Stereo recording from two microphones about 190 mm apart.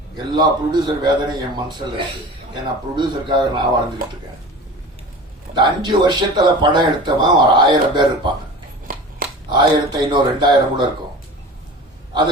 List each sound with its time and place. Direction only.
0.2 s speech: 25° right (ahead or behind)
2.9 s speech: 25° right (ahead or behind)
5.5 s speech: 25° right (ahead or behind)
9.5 s speech: 25° right (ahead or behind)